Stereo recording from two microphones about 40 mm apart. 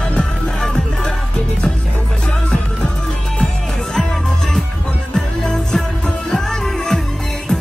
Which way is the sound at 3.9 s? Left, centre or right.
Centre.